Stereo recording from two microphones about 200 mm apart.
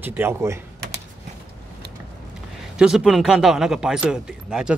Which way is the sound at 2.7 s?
5° right (ahead or behind).